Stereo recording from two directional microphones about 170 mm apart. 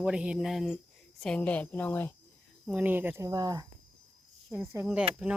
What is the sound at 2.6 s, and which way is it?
Speech, 10° right (ahead or behind).